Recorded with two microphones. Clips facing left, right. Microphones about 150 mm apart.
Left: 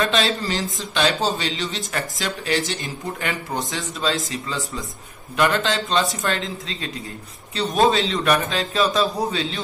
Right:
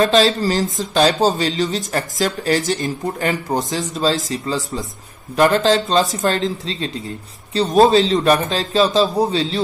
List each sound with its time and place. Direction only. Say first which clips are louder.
0.0 s speech: right 7 dB; 40° right (ahead or behind)
7.6 s a man's voice: right 6 dB; centre (ahead or behind)
8.1 s a man's voice: right 5 dB; 30° right (ahead or behind)